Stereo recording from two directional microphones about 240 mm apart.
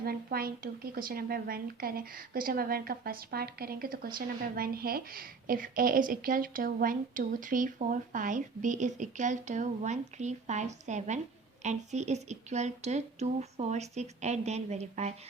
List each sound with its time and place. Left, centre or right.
0.0 s a woman's voice: right